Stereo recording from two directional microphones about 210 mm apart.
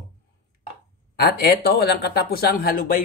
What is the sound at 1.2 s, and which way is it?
Speech, 50° left (ahead or behind).